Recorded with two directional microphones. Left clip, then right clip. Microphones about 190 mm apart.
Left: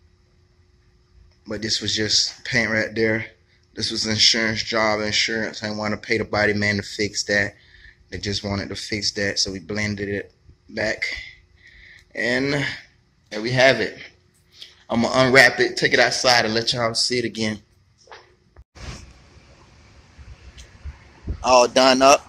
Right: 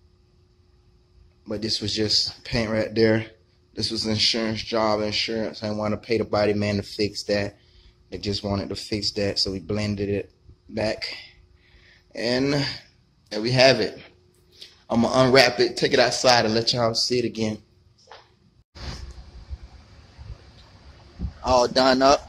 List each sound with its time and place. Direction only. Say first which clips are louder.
1.4 s a man's voice: left 2 dB; 5° right (ahead or behind)
2.9 s speech: right 1 dB; 20° right (ahead or behind)
3.7 s a man's voice: left 2 dB; 5° right (ahead or behind)
21.4 s speech: left 4 dB; 10° left (ahead or behind)